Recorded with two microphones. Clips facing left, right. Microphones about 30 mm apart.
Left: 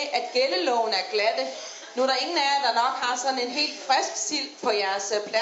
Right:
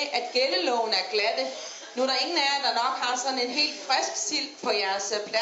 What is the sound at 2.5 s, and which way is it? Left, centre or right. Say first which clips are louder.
Speech: left 3 dB; centre.